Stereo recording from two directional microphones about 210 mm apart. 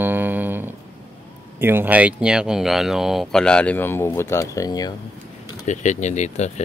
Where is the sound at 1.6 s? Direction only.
10° right (ahead or behind); by 4.9 s 20° left (ahead or behind).